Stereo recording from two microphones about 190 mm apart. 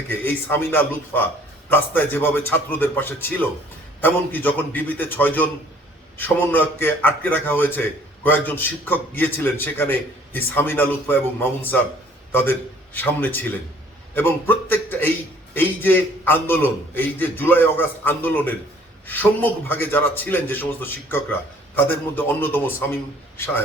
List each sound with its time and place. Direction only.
0.1 s a man's voice: 10° left (ahead or behind)